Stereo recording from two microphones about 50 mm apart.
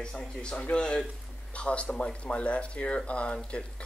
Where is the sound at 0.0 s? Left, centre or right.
Centre.